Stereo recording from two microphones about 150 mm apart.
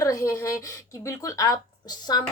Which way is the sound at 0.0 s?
20° left (ahead or behind).